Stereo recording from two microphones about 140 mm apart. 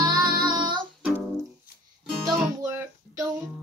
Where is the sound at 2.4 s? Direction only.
15° right (ahead or behind).